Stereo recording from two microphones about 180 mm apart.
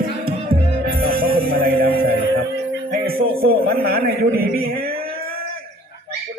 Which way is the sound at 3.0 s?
55° right (ahead or behind).